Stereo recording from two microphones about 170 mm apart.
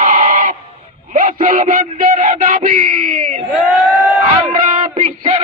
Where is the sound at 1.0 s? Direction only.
50° right (ahead or behind).